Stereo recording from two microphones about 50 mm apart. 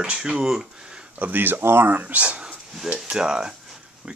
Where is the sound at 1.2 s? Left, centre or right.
Right.